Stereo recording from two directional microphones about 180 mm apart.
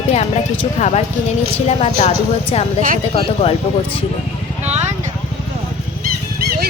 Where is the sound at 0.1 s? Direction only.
40° left (ahead or behind).